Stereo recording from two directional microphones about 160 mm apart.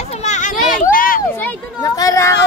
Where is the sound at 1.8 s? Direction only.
20° left (ahead or behind).